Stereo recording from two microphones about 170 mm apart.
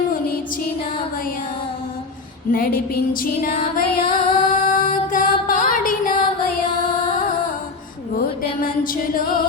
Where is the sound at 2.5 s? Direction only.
60° left (ahead or behind).